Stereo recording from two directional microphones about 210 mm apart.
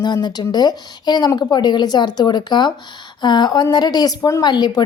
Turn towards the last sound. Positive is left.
turn(degrees=20)  # may be behind; listen again after turning